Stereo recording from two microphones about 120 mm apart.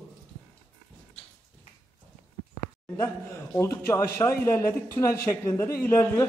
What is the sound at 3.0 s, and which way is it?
A man's voice, 20° left (ahead or behind).